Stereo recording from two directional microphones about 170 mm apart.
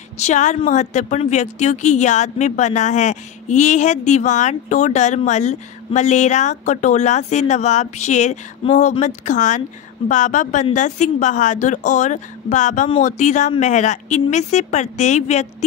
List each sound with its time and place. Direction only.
0.2 s speech: 45° left (ahead or behind)